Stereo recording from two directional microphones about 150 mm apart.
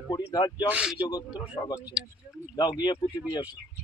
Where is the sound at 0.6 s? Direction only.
10° right (ahead or behind).